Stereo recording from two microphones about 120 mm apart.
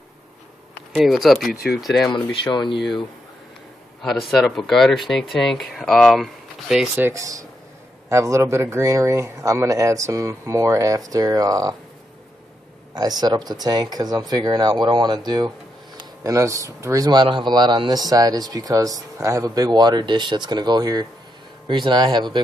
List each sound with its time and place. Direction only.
0.9 s speech: centre (ahead or behind)
2.3 s speech: 40° left (ahead or behind)
4.0 s speech: centre (ahead or behind)
7.0 s speech: 25° right (ahead or behind)
12.9 s speech: 35° right (ahead or behind)